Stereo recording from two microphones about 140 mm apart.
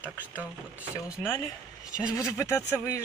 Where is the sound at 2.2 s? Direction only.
20° left (ahead or behind).